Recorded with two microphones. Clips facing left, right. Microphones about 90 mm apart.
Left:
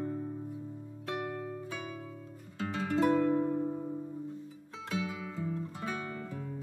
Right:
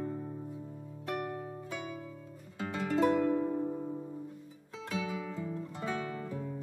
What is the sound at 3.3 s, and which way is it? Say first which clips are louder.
Music: left 1 dB; centre (ahead or behind).